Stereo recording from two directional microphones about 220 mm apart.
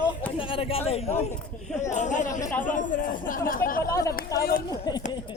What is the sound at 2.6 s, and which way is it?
Speech, 35° left (ahead or behind).